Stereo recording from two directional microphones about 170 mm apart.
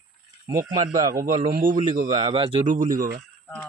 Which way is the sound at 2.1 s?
30° right (ahead or behind).